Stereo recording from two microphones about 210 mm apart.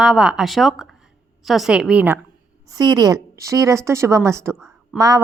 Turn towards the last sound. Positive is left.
turn(degrees=-15)  # may be behind; listen again after turning